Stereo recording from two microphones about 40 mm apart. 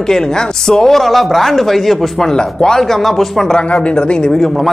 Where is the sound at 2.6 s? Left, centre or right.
Centre.